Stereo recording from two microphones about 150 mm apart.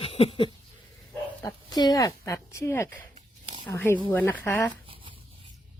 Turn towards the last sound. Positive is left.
turn(degrees=10)  # may be behind; listen again after turning